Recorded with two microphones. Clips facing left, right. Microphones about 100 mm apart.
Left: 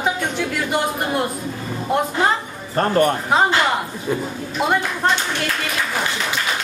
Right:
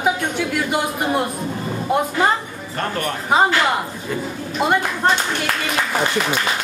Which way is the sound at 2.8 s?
35° left (ahead or behind).